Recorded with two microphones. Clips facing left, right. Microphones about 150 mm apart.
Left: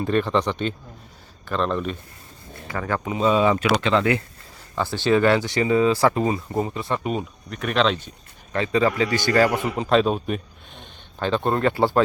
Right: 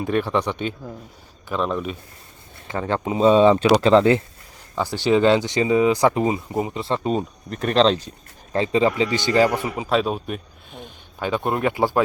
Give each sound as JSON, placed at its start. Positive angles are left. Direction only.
{"t": 0.0, "sound": "speech", "side_deg": -10}
{"t": 2.6, "sound": "speech", "side_deg": -25}
{"t": 4.7, "sound": "speech", "side_deg": -15}
{"t": 6.7, "sound": "speech", "side_deg": -25}
{"t": 9.6, "sound": "speech", "side_deg": -5}